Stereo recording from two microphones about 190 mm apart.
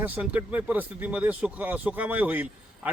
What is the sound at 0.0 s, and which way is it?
A man's voice, 10° right (ahead or behind).